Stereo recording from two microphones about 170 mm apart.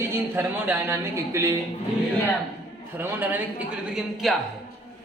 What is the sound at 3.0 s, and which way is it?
A man's voice, 10° right (ahead or behind).